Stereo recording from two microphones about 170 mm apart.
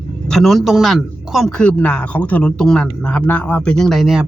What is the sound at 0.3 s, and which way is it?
A man's voice, centre (ahead or behind).